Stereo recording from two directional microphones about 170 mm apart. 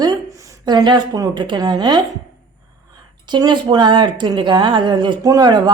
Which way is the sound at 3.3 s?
25° right (ahead or behind).